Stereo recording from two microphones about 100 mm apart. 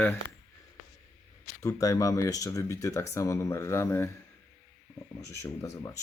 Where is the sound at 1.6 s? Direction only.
35° left (ahead or behind).